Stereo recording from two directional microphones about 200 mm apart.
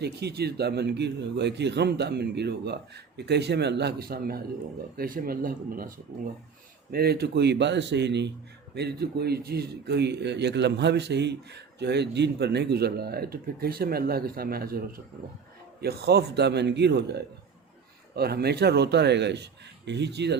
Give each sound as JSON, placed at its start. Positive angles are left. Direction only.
{"t": 0.0, "sound": "a man's voice", "side_deg": -55}
{"t": 6.9, "sound": "a man's voice", "side_deg": -50}